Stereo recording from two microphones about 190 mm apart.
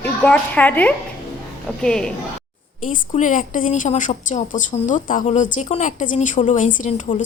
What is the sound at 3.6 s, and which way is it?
A woman's voice, 35° left (ahead or behind).